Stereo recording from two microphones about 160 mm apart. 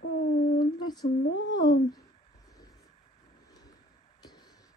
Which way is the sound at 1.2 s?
90° left.